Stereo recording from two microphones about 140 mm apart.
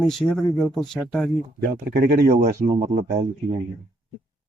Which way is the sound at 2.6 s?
70° right (ahead or behind).